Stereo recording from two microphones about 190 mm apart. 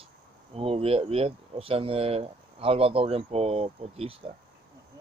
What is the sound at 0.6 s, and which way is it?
Speech, 30° right (ahead or behind).